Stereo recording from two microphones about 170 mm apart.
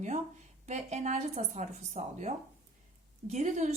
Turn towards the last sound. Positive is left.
turn(degrees=-45)  # may be behind; listen again after turning